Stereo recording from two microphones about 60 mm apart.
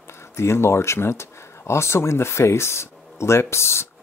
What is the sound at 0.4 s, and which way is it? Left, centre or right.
Speech, left.